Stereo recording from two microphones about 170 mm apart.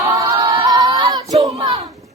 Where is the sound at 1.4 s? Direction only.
25° right (ahead or behind).